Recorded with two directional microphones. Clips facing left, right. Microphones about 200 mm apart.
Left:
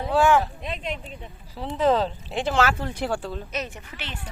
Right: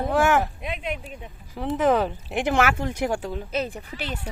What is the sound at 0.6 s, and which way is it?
Speech, 5° right (ahead or behind).